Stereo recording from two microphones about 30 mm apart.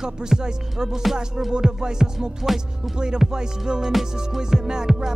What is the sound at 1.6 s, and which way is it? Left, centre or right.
Music, right.